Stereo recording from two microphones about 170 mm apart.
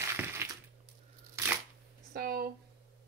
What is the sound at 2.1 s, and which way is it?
Speech, 60° right (ahead or behind).